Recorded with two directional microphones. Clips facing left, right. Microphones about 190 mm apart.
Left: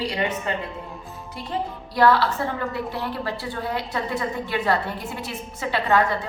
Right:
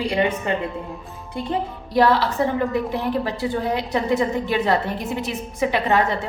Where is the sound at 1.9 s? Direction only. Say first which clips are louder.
Right 2 dB; 20° right (ahead or behind).